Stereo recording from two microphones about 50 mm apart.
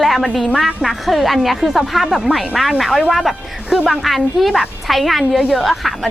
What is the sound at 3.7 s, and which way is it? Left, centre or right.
Speech, centre.